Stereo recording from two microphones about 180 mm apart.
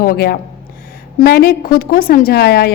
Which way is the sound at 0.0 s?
55° left (ahead or behind).